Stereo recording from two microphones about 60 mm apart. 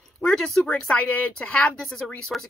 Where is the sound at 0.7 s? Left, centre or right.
Left.